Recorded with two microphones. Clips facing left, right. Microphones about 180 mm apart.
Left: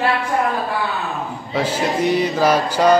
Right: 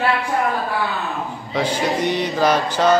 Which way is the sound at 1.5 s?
5° left (ahead or behind).